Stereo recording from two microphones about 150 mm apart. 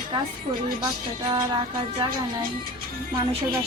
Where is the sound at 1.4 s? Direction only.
30° right (ahead or behind).